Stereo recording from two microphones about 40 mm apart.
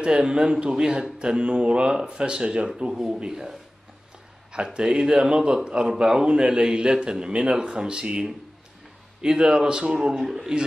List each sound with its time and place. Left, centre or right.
0.0 s a man's voice: right
10.1 s a man's voice: centre